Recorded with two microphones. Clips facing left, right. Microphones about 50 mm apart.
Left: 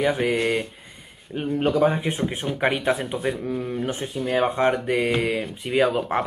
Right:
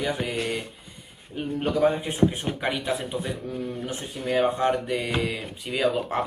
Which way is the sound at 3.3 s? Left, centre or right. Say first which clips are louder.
Left 5 dB; left.